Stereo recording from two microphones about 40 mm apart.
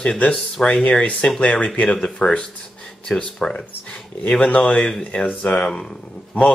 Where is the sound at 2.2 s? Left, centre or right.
Centre.